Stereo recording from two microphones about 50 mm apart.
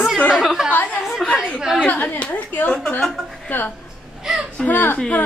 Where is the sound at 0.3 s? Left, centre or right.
Centre.